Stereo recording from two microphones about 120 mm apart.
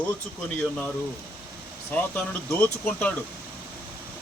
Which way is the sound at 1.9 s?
10° left (ahead or behind).